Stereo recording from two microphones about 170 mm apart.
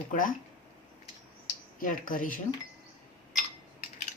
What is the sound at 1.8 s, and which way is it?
Speech, 55° left (ahead or behind).